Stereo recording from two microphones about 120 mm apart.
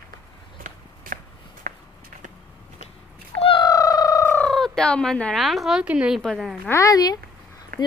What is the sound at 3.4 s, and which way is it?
Cat, 45° left (ahead or behind).